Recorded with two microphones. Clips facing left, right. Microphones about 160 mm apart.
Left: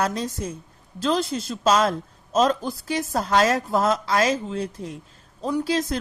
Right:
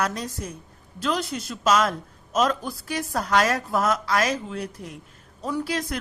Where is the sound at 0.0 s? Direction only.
25° left (ahead or behind).